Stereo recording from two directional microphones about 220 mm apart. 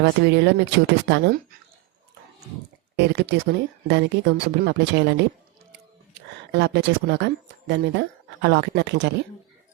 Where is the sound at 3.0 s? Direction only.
50° right (ahead or behind).